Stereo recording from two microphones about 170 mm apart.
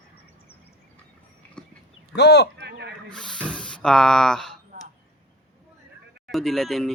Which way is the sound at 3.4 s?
5° left (ahead or behind).